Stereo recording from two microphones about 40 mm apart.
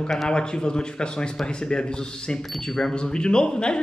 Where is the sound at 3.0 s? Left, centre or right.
Left.